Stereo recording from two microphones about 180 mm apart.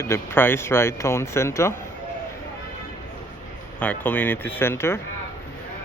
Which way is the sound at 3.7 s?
10° left (ahead or behind).